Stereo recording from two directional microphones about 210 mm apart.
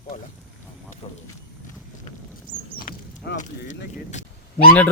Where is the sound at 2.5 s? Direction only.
10° right (ahead or behind).